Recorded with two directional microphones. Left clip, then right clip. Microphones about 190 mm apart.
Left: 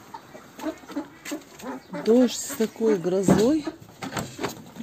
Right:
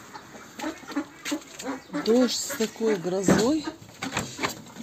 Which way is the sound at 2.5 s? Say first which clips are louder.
Left 3 dB; 25° left (ahead or behind).